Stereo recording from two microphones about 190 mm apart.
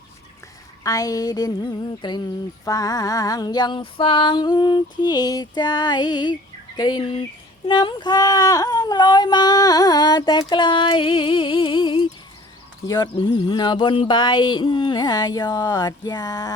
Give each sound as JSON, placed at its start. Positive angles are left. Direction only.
{"t": 0.9, "sound": "speech", "side_deg": 20}